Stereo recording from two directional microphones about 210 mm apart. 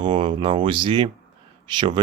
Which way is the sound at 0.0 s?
20° right (ahead or behind).